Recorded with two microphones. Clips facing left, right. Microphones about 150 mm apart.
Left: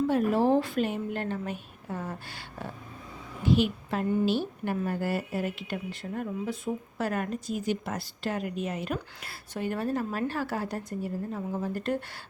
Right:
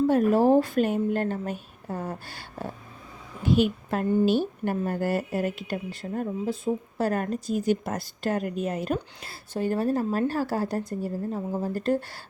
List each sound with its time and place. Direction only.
0.1 s a woman's voice: 45° right (ahead or behind)